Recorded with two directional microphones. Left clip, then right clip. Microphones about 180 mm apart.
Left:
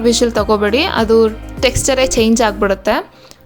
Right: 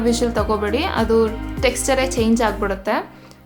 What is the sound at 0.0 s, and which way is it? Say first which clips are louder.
A woman's voice: left 6 dB; 30° left (ahead or behind).